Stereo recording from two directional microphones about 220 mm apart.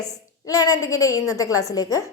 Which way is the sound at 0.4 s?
15° left (ahead or behind).